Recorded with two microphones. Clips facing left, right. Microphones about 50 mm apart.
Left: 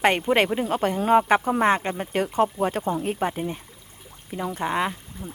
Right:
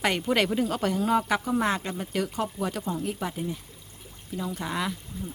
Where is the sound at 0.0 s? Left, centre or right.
Left.